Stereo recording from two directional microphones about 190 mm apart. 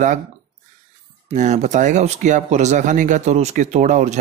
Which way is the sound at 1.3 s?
40° right (ahead or behind).